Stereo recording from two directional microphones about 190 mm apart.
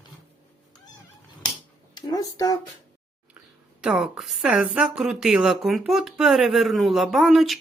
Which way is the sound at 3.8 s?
5° right (ahead or behind).